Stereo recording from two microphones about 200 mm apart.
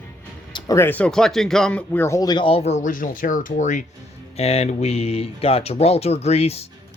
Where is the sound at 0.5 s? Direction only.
15° left (ahead or behind).